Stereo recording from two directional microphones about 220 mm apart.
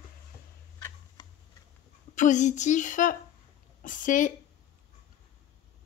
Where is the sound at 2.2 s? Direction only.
35° left (ahead or behind).